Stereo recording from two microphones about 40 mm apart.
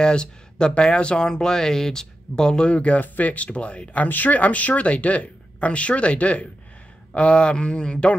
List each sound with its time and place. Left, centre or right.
0.0 s speech: left
4.1 s speech: left